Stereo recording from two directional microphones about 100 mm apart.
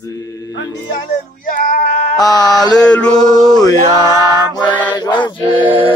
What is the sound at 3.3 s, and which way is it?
Mantra, 40° left (ahead or behind).